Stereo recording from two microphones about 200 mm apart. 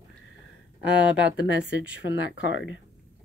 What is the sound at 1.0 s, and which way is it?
Speech, 5° right (ahead or behind).